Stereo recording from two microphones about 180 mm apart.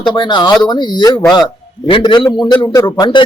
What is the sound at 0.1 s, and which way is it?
A man's voice, 25° left (ahead or behind).